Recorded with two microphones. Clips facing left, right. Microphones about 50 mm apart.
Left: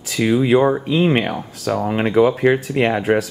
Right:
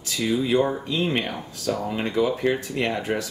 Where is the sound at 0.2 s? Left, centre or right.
Left.